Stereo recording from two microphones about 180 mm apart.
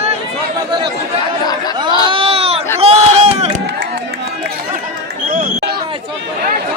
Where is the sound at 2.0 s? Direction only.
30° right (ahead or behind).